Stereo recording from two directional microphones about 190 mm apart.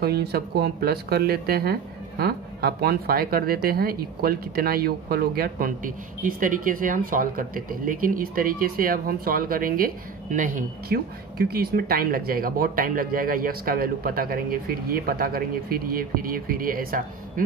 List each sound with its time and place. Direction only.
0.0 s speech: 55° right (ahead or behind)